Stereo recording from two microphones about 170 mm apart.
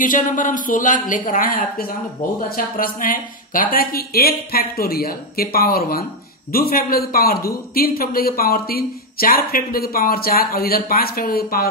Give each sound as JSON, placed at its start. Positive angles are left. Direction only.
{"t": 0.0, "sound": "a woman's voice", "side_deg": 50}